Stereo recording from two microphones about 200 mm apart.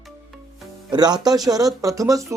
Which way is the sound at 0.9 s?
20° right (ahead or behind).